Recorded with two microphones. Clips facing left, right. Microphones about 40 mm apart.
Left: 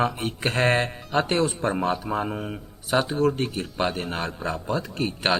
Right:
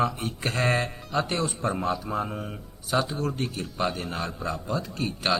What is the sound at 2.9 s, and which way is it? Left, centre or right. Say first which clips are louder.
A man's voice: left 5 dB; left.